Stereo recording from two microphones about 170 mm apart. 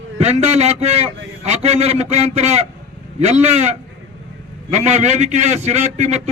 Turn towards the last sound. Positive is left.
turn(degrees=-40)  # may be behind; listen again after turning